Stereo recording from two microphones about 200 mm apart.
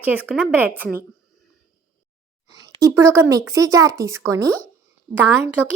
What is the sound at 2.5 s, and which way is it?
Speech, 15° right (ahead or behind).